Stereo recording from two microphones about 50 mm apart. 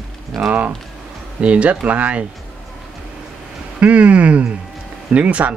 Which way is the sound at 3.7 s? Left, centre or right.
Right.